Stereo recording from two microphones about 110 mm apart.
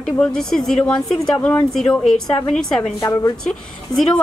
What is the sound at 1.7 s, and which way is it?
A woman's voice, 5° left (ahead or behind).